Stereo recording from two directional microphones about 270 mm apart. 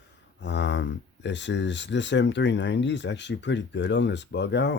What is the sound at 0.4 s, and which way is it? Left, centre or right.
Speech, left.